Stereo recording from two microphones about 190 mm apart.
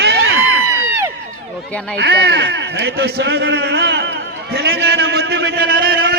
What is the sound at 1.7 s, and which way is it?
Speech, 5° left (ahead or behind).